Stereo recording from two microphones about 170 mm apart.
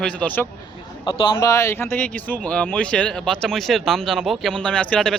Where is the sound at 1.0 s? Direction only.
30° left (ahead or behind).